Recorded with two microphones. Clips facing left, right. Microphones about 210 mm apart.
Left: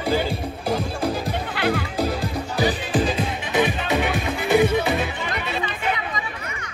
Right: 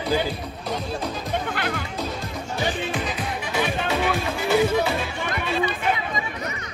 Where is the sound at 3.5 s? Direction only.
20° left (ahead or behind).